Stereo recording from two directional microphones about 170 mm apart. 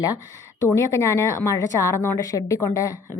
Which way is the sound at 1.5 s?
15° left (ahead or behind).